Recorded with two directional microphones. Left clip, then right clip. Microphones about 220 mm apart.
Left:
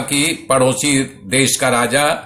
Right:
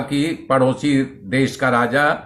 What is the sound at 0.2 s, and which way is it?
A man's voice, 20° left (ahead or behind).